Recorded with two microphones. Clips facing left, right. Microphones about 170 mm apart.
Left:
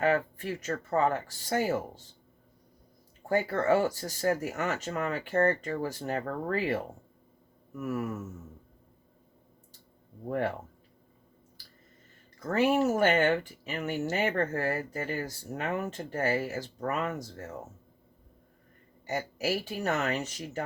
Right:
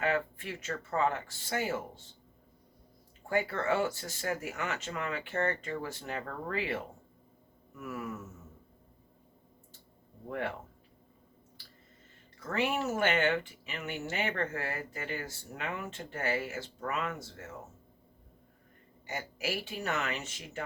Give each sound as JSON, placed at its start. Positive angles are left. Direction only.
{"t": 0.0, "sound": "speech", "side_deg": 40}
{"t": 3.2, "sound": "speech", "side_deg": 40}
{"t": 7.8, "sound": "a sound", "side_deg": 45}
{"t": 10.2, "sound": "speech", "side_deg": 40}
{"t": 12.4, "sound": "speech", "side_deg": 40}
{"t": 19.0, "sound": "speech", "side_deg": 40}